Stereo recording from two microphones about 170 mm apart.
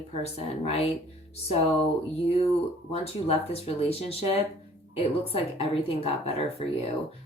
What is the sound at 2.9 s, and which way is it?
A woman's voice, 35° left (ahead or behind).